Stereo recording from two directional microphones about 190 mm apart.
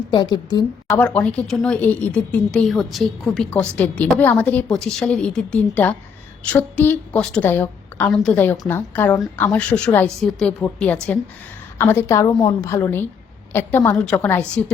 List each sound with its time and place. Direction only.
0.1 s a woman's voice: 25° left (ahead or behind)
0.9 s a woman's voice: 5° left (ahead or behind)